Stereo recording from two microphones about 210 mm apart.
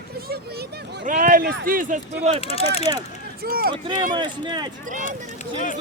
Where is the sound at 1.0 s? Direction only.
40° right (ahead or behind).